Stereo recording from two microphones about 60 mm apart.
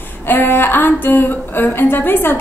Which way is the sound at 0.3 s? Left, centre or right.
Left.